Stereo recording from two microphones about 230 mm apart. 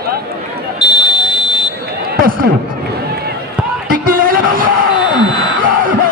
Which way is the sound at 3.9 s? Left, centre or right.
Right.